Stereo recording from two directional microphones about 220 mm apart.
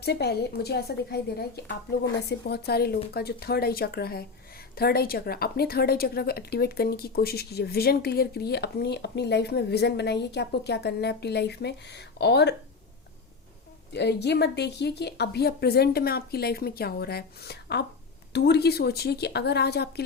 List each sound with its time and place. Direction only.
0.0 s a woman's voice: 50° left (ahead or behind)
13.9 s a woman's voice: 50° left (ahead or behind)